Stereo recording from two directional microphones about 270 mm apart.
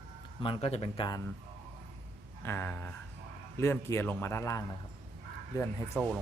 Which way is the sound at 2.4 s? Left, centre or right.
Centre.